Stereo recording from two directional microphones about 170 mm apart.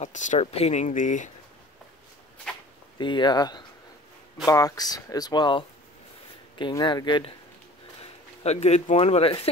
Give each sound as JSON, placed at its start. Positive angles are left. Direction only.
{"t": 0.0, "sound": "speech", "side_deg": 45}
{"t": 2.5, "sound": "a sound", "side_deg": 5}
{"t": 3.0, "sound": "speech", "side_deg": 25}
{"t": 8.0, "sound": "speech", "side_deg": 40}